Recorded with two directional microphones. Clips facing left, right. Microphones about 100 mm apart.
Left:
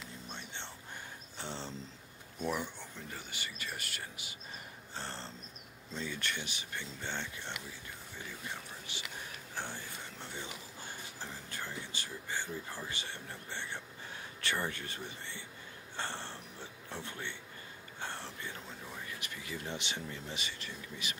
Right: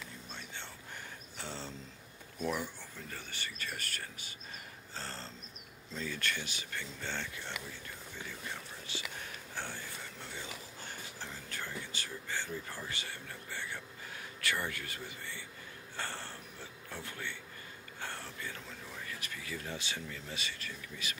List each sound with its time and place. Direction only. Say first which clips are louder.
0.3 s whispering: left 1 dB; 20° left (ahead or behind)
1.4 s a sound: left 1 dB; 20° left (ahead or behind)
2.4 s speech: even; 20° left (ahead or behind)
10.3 s speech: left 1 dB; 15° left (ahead or behind)
16.0 s a sound: left 1 dB; 20° left (ahead or behind)
18.0 s speech: left 1 dB; 20° left (ahead or behind)